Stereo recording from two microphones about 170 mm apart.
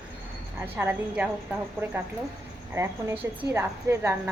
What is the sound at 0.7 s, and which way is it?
Speech, 15° right (ahead or behind).